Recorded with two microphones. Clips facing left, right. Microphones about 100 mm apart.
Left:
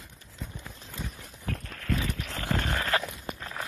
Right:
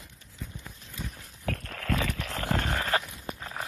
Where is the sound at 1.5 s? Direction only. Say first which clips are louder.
Right 1 dB; 75° right (ahead or behind).